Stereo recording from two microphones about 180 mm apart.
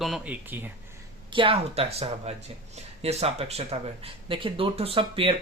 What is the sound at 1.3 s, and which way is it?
Speech, 30° right (ahead or behind).